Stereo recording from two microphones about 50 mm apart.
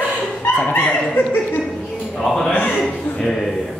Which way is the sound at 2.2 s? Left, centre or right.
Centre.